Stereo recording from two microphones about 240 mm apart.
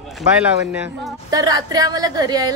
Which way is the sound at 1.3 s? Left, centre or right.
Centre.